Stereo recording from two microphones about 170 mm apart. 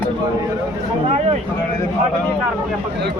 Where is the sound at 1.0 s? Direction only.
40° right (ahead or behind).